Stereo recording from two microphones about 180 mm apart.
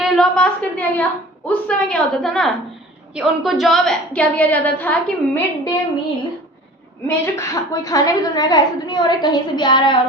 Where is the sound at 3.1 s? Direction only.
Centre (ahead or behind).